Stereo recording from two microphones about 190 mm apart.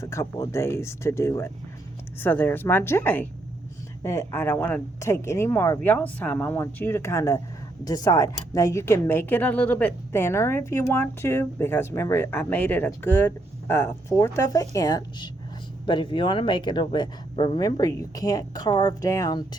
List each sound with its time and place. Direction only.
0.0 s a woman's voice: 15° left (ahead or behind)